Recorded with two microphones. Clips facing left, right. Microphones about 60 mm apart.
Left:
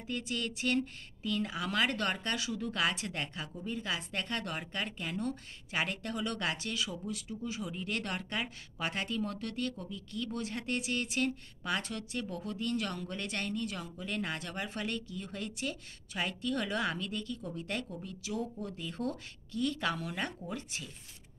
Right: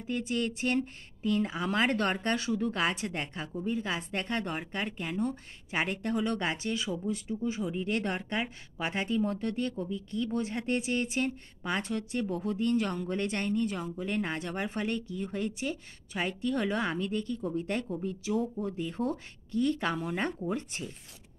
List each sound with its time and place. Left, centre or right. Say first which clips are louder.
0.1 s a woman's voice: right 5 dB; right